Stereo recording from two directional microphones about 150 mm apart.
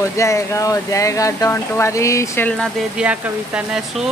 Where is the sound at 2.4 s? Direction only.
5° left (ahead or behind).